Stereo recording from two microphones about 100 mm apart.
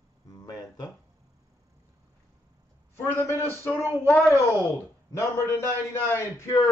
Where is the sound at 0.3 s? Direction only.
40° left (ahead or behind).